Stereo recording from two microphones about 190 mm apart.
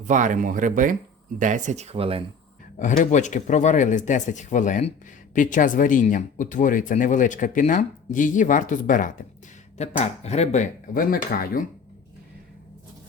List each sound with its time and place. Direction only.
0.0 s speech: 40° right (ahead or behind)
2.7 s speech: 40° left (ahead or behind)